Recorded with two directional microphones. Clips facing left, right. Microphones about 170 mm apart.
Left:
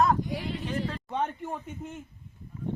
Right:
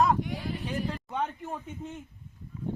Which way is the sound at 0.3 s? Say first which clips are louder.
Left 2 dB; 75° left (ahead or behind).